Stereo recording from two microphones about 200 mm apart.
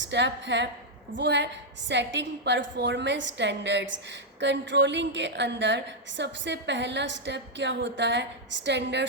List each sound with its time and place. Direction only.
0.0 s a woman's voice: 60° right (ahead or behind)